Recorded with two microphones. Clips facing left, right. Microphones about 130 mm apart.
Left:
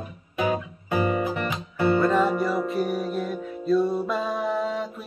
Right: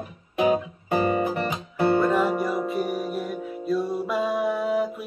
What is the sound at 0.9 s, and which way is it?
Music, 45° right (ahead or behind).